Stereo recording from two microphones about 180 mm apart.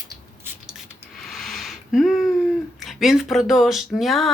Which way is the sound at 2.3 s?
Centre (ahead or behind).